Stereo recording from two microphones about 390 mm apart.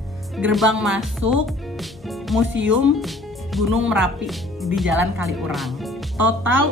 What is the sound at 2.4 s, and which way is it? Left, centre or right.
Speech, right.